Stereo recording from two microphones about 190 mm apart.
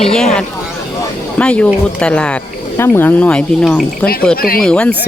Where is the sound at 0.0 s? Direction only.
5° left (ahead or behind).